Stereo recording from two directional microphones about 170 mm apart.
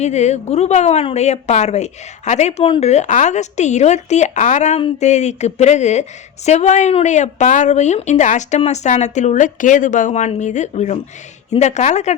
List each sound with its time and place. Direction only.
0.0 s a woman's voice: 40° left (ahead or behind)